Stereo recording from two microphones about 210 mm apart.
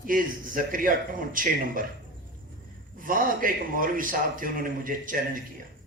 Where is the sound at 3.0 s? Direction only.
40° right (ahead or behind).